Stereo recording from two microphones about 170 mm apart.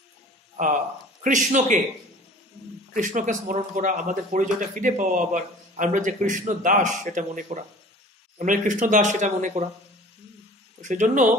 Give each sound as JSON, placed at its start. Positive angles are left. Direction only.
{"t": 0.6, "sound": "a man's voice", "side_deg": -45}
{"t": 2.9, "sound": "a man's voice", "side_deg": -50}
{"t": 10.8, "sound": "a man's voice", "side_deg": -45}